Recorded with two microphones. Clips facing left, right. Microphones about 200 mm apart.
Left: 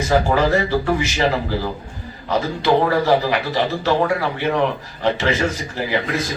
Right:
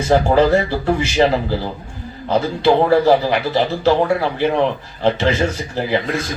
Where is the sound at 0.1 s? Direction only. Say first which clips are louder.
Right 4 dB; 30° right (ahead or behind).